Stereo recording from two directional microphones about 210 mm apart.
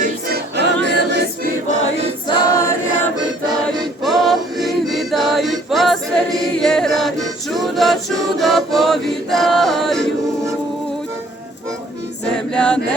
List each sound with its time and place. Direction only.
0.0 s music: 50° right (ahead or behind)
2.2 s choir: 20° left (ahead or behind)
4.0 s male singing: centre (ahead or behind)
6.6 s choir: centre (ahead or behind)
7.5 s a capella: centre (ahead or behind)
8.4 s chant: centre (ahead or behind)
12.5 s chant: 5° left (ahead or behind)